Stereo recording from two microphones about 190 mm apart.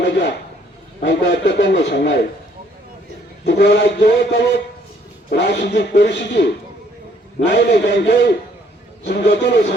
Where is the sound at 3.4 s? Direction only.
65° left (ahead or behind).